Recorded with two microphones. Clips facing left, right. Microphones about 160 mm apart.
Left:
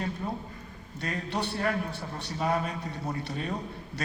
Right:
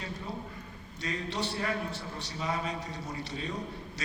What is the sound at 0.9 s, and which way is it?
A man's voice, 55° left (ahead or behind).